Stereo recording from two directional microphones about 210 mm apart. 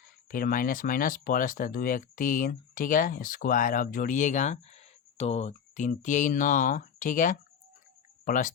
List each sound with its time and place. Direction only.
0.3 s speech: 40° left (ahead or behind)